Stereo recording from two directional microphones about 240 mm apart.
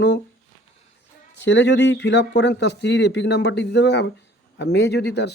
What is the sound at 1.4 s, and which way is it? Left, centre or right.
Speech, left.